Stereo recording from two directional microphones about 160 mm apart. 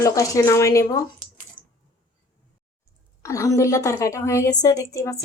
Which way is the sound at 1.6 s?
30° right (ahead or behind).